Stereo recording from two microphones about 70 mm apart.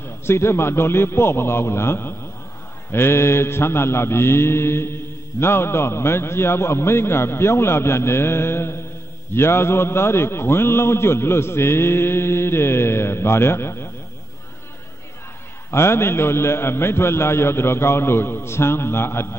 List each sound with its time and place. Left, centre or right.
0.2 s a man's voice: left
15.7 s a man's voice: left